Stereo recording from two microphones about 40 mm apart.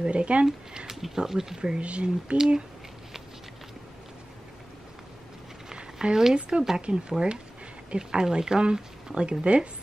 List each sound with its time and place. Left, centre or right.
0.0 s speech: right
0.9 s speech: centre
1.8 s speech: right
2.3 s speech: centre
5.7 s a sound: right
6.6 s speech: centre